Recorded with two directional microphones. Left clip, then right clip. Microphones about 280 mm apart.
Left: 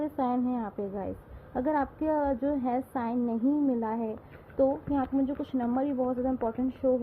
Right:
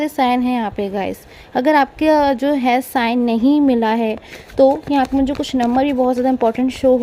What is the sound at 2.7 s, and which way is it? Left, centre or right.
Speech, right.